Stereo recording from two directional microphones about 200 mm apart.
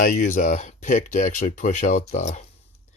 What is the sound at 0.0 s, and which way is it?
Speech, 40° left (ahead or behind).